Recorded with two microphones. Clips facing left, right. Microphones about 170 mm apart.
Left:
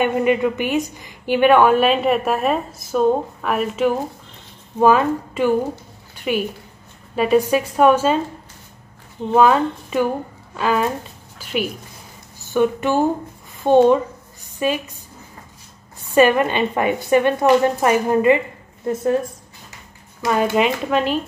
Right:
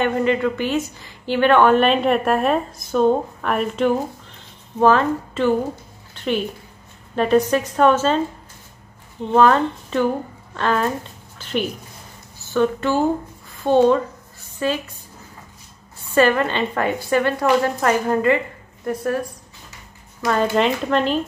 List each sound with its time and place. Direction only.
0.0 s a woman's voice: 15° left (ahead or behind)
6.1 s a sound: 10° left (ahead or behind)
7.2 s a woman's voice: 10° left (ahead or behind)
9.3 s a woman's voice: 10° left (ahead or behind)
16.2 s a woman's voice: 15° left (ahead or behind)
20.2 s a woman's voice: 10° left (ahead or behind)